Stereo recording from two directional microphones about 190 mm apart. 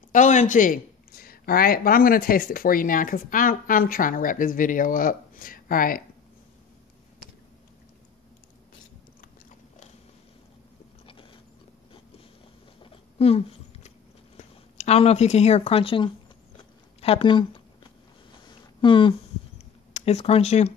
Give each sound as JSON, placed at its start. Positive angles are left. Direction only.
{"t": 0.1, "sound": "speech", "side_deg": 40}
{"t": 13.2, "sound": "speech", "side_deg": 30}
{"t": 13.8, "sound": "a sound", "side_deg": 35}